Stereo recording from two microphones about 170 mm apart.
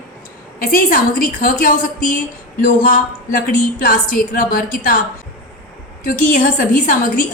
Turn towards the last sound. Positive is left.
turn(degrees=55)  # may be behind; listen again after turning